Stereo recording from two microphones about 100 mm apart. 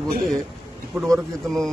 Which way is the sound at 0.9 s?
5° left (ahead or behind).